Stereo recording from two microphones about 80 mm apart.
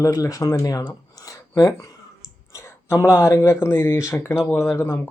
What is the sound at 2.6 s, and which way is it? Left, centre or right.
Speech, left.